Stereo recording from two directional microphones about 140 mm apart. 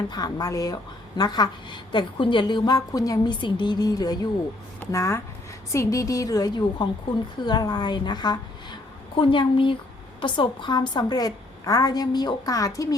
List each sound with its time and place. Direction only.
0.1 s a woman's voice: 30° left (ahead or behind)